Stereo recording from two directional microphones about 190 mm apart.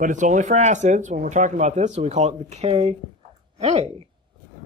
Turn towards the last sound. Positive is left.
turn(degrees=-35)  # may be behind; listen again after turning